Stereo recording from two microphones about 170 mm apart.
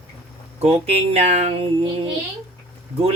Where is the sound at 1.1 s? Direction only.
40° right (ahead or behind).